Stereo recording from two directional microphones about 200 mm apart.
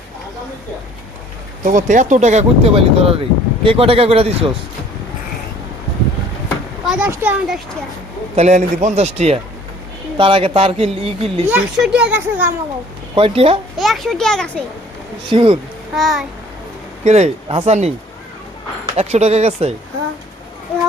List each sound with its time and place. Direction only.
1.6 s speech: 40° right (ahead or behind)
6.8 s speech: 5° right (ahead or behind)
8.4 s a man's voice: 35° right (ahead or behind)
11.5 s speech: 5° right (ahead or behind)
13.1 s speech: 30° right (ahead or behind)
13.7 s speech: centre (ahead or behind)
15.3 s speech: 25° right (ahead or behind)
16.0 s speech: centre (ahead or behind)
17.0 s a man's voice: 35° right (ahead or behind)
18.9 s a man's voice: 30° right (ahead or behind)